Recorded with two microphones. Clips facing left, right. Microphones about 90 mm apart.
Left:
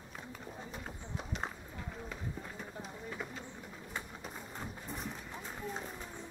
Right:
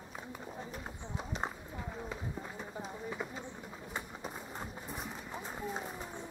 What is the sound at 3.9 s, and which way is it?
Horse, 15° right (ahead or behind).